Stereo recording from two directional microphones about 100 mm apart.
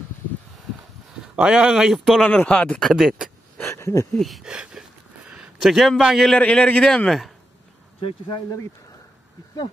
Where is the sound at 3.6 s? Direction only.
30° left (ahead or behind).